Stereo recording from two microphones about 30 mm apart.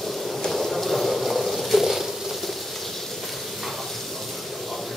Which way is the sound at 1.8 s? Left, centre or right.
Centre.